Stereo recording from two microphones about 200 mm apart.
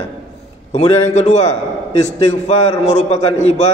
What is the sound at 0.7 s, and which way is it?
A man's voice, 35° left (ahead or behind).